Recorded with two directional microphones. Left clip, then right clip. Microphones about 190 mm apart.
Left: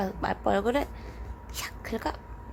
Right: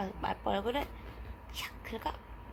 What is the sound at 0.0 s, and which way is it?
A woman's voice, 35° left (ahead or behind).